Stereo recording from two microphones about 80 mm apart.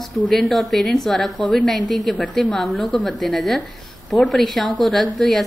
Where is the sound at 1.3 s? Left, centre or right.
Centre.